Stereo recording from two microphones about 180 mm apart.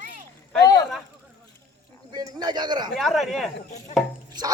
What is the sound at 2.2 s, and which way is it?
Speech, 25° right (ahead or behind).